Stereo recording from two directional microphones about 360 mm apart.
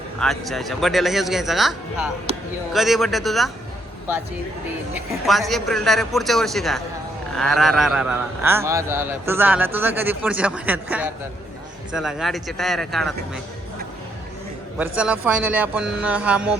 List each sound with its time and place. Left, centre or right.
0.2 s speech: centre
2.3 s a sound: centre
2.7 s speech: centre
4.9 s speech: centre
14.8 s speech: centre